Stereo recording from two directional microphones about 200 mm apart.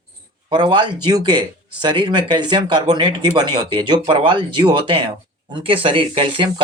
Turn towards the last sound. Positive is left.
turn(degrees=-25)  # may be behind; listen again after turning